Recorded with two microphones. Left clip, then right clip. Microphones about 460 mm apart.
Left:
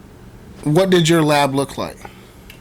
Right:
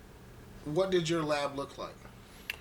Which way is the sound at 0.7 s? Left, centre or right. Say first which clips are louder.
Left 15 dB; left.